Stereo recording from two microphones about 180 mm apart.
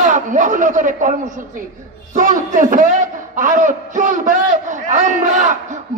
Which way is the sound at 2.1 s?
45° right (ahead or behind).